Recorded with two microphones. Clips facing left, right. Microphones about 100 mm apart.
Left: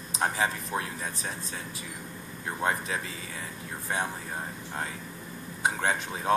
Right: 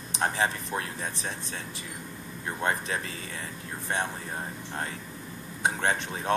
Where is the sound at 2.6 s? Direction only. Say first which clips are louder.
Even; 10° left (ahead or behind).